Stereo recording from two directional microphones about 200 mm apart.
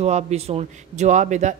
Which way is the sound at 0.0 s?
35° right (ahead or behind).